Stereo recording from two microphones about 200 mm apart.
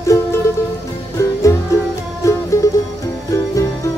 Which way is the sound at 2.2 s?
15° left (ahead or behind).